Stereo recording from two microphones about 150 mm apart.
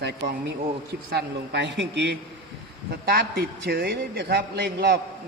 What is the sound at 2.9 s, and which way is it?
A man's voice, 90° right.